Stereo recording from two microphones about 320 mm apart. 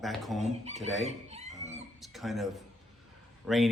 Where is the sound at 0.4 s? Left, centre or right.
Right.